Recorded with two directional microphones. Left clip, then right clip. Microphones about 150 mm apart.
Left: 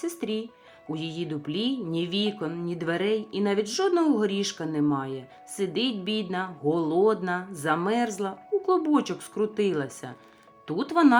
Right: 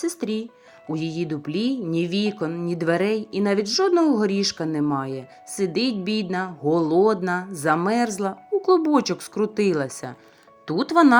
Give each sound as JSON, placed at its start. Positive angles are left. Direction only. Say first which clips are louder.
{"t": 0.0, "sound": "speech", "louder": "right 4 dB", "side_deg": -30}